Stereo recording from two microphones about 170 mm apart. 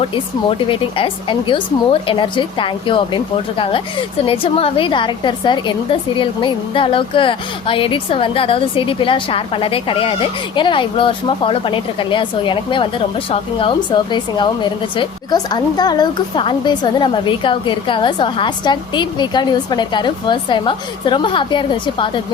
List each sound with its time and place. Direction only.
0.7 s a woman's voice: 30° left (ahead or behind)
4.3 s a woman's voice: 35° left (ahead or behind)